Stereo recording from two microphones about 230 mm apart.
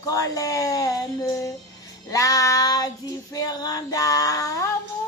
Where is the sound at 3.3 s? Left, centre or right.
Centre.